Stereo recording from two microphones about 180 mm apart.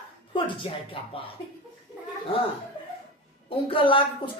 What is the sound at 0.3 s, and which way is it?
Speech, 25° left (ahead or behind).